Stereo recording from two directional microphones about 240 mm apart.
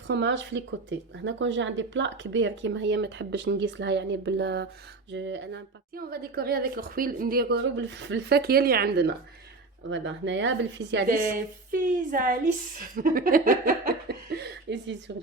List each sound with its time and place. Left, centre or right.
0.1 s a woman's voice: right